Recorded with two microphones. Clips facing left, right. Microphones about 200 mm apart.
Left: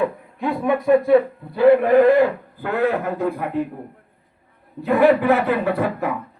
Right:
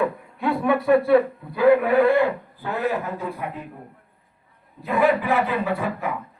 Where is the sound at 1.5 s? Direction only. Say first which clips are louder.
Left 3 dB; 35° left (ahead or behind); by 3.6 s 60° left (ahead or behind).